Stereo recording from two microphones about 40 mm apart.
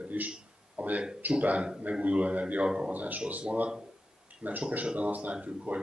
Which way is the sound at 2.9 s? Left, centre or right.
Right.